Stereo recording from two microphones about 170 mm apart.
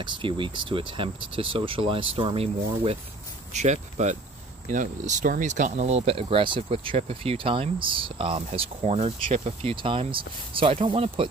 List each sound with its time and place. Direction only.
0.0 s speech: 30° right (ahead or behind)